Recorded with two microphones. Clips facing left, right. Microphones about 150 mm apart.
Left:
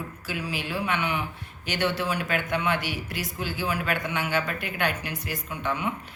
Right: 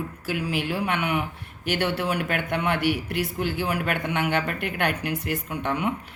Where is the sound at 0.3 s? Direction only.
60° right (ahead or behind).